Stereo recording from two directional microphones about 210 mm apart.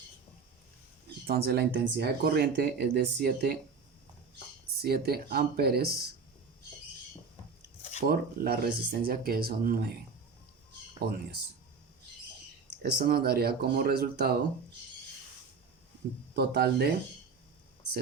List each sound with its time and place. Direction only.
1.3 s speech: 50° right (ahead or behind)
4.6 s speech: 50° right (ahead or behind)
7.8 s drip: 30° left (ahead or behind)
8.0 s speech: 45° right (ahead or behind)
12.6 s speech: 50° right (ahead or behind)
16.3 s speech: 50° right (ahead or behind)